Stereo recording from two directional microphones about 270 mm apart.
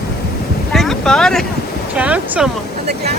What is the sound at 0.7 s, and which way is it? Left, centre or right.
Speech, centre.